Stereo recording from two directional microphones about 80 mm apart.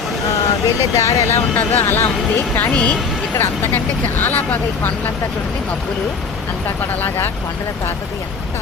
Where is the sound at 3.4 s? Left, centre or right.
Left.